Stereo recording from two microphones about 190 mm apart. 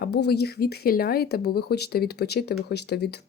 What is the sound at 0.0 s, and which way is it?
Speech, 55° left (ahead or behind).